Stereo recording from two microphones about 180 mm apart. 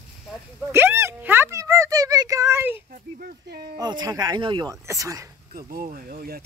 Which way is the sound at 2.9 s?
55° right (ahead or behind).